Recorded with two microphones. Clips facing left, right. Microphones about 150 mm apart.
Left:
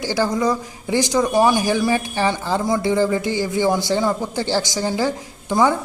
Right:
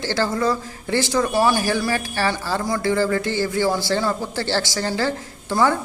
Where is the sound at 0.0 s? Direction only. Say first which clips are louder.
Left 2 dB; 15° left (ahead or behind).